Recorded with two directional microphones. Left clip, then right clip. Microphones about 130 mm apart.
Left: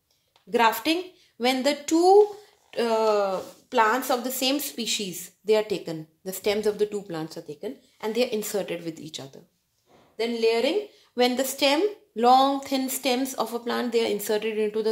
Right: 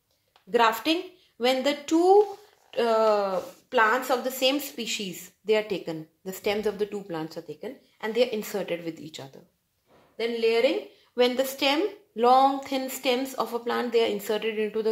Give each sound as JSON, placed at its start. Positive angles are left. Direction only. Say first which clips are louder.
{"t": 0.5, "sound": "a woman's voice", "louder": "left 1 dB", "side_deg": 35}